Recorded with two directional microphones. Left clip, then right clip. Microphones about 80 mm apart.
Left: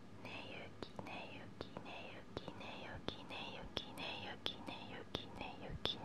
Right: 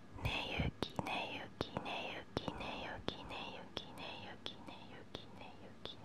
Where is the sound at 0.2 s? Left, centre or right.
Right; by 5.5 s centre.